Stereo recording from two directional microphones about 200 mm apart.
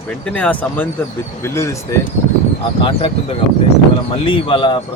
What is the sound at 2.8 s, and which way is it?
Speech, 30° left (ahead or behind).